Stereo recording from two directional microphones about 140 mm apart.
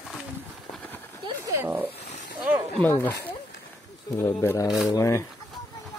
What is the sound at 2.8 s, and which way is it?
Speech, 15° left (ahead or behind).